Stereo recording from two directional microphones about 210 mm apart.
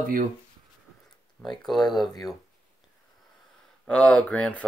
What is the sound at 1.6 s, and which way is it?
Speech, centre (ahead or behind).